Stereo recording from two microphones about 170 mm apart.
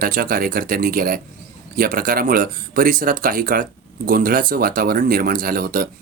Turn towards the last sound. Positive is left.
turn(degrees=-60)  # may be behind; listen again after turning